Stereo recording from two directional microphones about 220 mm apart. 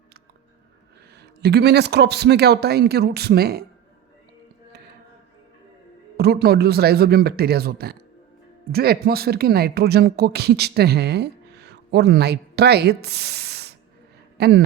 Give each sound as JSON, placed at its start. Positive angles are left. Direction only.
{"t": 1.1, "sound": "speech", "side_deg": -50}
{"t": 6.1, "sound": "speech", "side_deg": -45}